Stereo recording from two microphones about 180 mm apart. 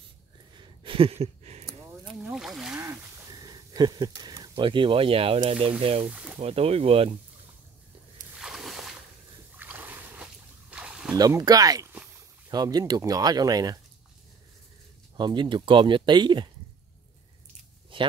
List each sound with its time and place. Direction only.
0.6 s a sound: 30° right (ahead or behind)
2.1 s boat: 5° right (ahead or behind)
2.8 s a sound: 20° right (ahead or behind)
5.8 s speech: 30° right (ahead or behind)
6.0 s speech: 5° right (ahead or behind)
6.4 s speech: 35° right (ahead or behind)
8.4 s a sound: centre (ahead or behind)
11.1 s speech: 20° right (ahead or behind)
15.1 s speech: 25° right (ahead or behind)